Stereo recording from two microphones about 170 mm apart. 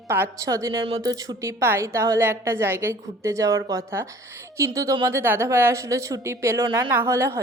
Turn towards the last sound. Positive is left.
turn(degrees=-15)  # may be behind; listen again after turning